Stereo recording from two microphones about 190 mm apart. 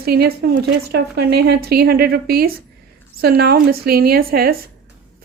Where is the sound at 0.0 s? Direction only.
55° right (ahead or behind).